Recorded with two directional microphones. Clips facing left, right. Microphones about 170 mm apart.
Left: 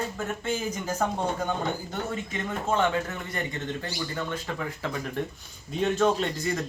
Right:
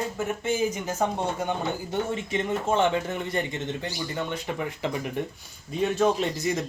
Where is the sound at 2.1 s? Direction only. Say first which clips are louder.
Right 4 dB; 25° right (ahead or behind).